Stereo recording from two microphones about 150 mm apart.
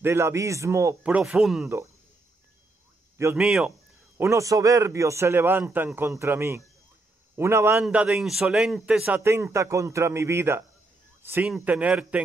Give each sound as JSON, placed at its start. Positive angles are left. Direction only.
{"t": 0.0, "sound": "a man's voice", "side_deg": -15}
{"t": 1.0, "sound": "a man's voice", "side_deg": -5}
{"t": 3.3, "sound": "a man's voice", "side_deg": -5}
{"t": 4.2, "sound": "a man's voice", "side_deg": -20}
{"t": 7.8, "sound": "a man's voice", "side_deg": -5}
{"t": 9.2, "sound": "a man's voice", "side_deg": -15}